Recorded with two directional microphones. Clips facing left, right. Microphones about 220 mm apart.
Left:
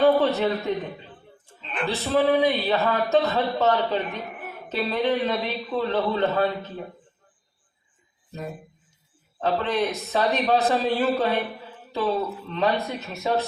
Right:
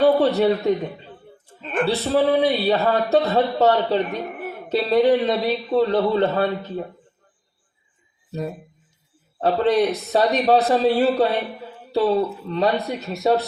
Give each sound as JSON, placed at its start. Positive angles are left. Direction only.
{"t": 0.0, "sound": "a man's voice", "side_deg": -35}
{"t": 9.4, "sound": "speech", "side_deg": -35}